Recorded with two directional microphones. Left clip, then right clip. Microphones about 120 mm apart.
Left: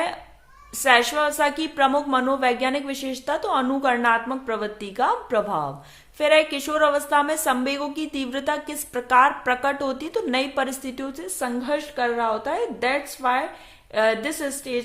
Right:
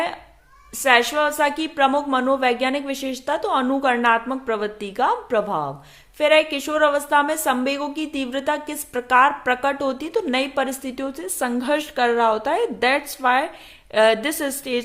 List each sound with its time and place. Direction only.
0.8 s a woman's voice: 20° right (ahead or behind); by 14.8 s 40° right (ahead or behind)